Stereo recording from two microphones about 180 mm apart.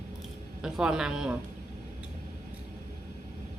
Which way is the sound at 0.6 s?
5° right (ahead or behind).